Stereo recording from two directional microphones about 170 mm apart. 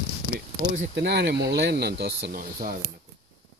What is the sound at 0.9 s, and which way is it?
Speech, 80° right.